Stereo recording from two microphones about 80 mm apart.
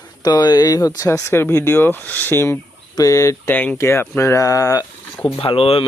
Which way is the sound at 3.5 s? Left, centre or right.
Left.